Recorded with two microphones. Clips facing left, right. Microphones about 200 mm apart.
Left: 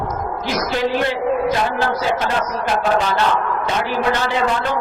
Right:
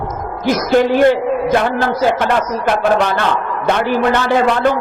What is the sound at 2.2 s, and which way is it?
A man's voice, 60° right (ahead or behind).